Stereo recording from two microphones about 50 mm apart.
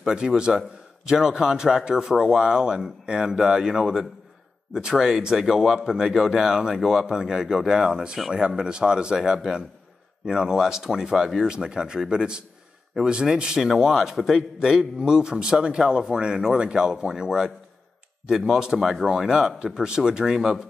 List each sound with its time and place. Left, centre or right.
0.0 s a man's voice: centre
11.4 s speech: centre